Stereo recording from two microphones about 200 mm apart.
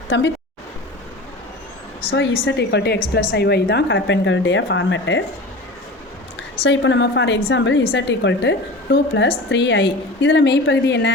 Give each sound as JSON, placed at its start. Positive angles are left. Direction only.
{"t": 0.1, "sound": "a woman's voice", "side_deg": 65}
{"t": 2.0, "sound": "a woman's voice", "side_deg": 50}
{"t": 6.6, "sound": "a woman's voice", "side_deg": 65}